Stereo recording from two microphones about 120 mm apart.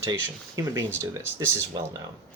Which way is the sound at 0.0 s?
25° right (ahead or behind).